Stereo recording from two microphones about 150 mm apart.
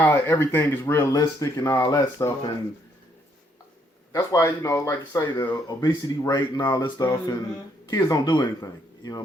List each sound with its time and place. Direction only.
0.0 s speech: 15° left (ahead or behind)
4.1 s speech: 25° left (ahead or behind)